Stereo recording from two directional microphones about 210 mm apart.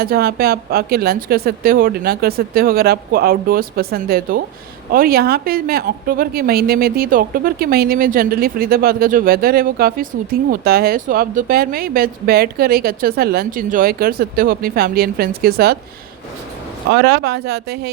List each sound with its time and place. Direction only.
0.0 s speech: 45° right (ahead or behind)
16.9 s speech: 50° right (ahead or behind)